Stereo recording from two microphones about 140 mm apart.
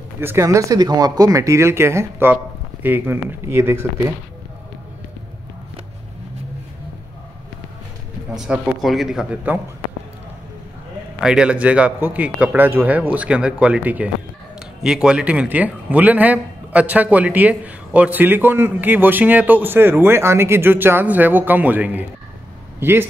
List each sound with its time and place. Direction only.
0.2 s a man's voice: 20° right (ahead or behind)
8.4 s speech: 5° right (ahead or behind)
11.1 s a man's voice: 5° right (ahead or behind)